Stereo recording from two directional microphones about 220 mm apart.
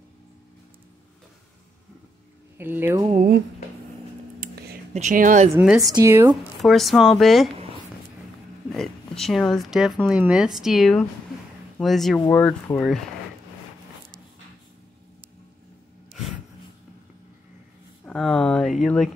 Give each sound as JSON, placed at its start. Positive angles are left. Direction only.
{"t": 2.5, "sound": "speech", "side_deg": -10}
{"t": 4.4, "sound": "a sound", "side_deg": -45}
{"t": 4.9, "sound": "a woman's voice", "side_deg": -35}
{"t": 5.6, "sound": "speech", "side_deg": -5}
{"t": 6.6, "sound": "speech", "side_deg": 0}
{"t": 8.7, "sound": "speech", "side_deg": 0}
{"t": 18.0, "sound": "a sound", "side_deg": 0}